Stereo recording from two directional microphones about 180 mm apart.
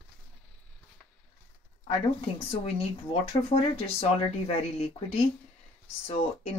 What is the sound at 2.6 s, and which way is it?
Speech, 30° left (ahead or behind).